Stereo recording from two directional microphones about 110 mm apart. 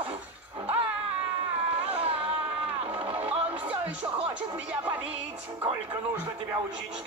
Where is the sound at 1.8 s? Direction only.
60° right (ahead or behind).